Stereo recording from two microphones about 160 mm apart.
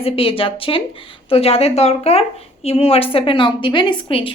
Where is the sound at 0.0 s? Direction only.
35° left (ahead or behind).